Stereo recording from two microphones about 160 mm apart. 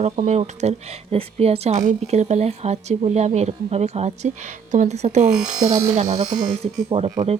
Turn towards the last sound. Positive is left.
turn(degrees=-40)  # may be behind; listen again after turning